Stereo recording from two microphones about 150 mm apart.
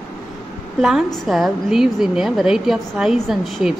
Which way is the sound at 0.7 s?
5° right (ahead or behind).